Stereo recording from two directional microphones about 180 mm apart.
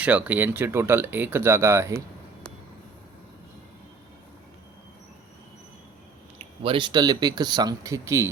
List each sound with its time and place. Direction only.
0.0 s speech: 5° right (ahead or behind)
6.6 s speech: 30° right (ahead or behind)